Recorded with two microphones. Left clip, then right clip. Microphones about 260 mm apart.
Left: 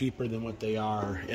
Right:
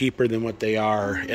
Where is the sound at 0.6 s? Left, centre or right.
Right.